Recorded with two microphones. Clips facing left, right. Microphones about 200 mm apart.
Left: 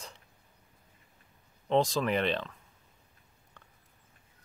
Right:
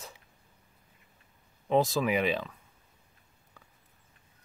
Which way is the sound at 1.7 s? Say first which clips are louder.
Right 1 dB; 5° right (ahead or behind).